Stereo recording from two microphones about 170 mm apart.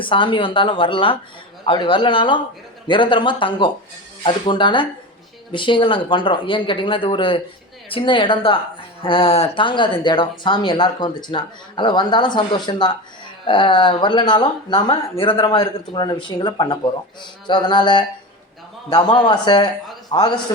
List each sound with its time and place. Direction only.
0.0 s a woman's voice: 30° left (ahead or behind)